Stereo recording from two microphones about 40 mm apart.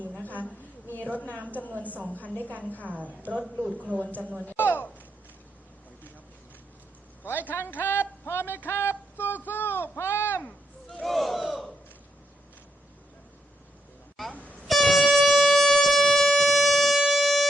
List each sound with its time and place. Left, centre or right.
0.2 s a sound: left
1.5 s a woman's voice: left
1.9 s a woman's voice: right
2.1 s a woman's voice: left
3.6 s a woman's voice: right
4.5 s a sound: left
7.3 s a woman's voice: left
7.5 s a sound: left
10.0 s a sound: left
11.0 s battle cry: centre
14.7 s air horn: centre
17.0 s siren: centre